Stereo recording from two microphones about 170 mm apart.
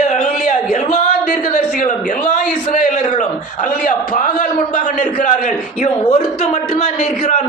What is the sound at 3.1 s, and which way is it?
A man's voice, 50° left (ahead or behind).